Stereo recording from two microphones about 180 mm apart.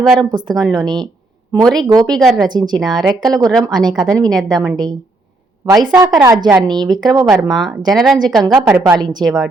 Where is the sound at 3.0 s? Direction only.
Centre (ahead or behind).